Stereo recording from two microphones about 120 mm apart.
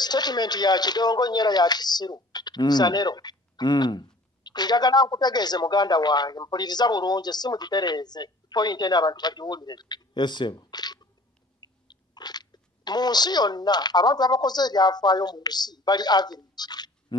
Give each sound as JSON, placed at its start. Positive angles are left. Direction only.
{"t": 0.0, "sound": "speech", "side_deg": 35}